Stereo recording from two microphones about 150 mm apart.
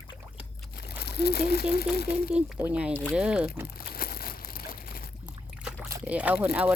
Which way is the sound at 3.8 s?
80° left.